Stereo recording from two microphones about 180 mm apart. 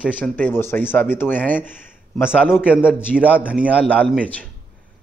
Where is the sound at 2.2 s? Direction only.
5° right (ahead or behind).